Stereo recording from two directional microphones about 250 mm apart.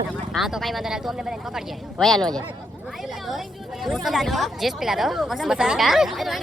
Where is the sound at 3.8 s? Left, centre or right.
Centre.